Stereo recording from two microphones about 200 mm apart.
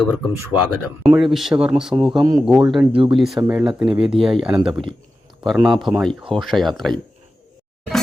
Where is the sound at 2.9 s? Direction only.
25° right (ahead or behind).